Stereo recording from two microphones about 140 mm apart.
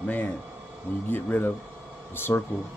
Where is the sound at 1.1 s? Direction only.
15° left (ahead or behind).